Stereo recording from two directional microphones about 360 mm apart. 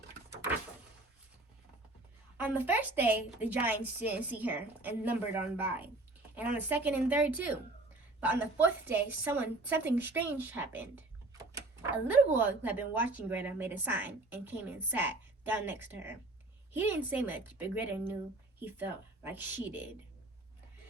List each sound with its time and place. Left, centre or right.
2.4 s a woman's voice: centre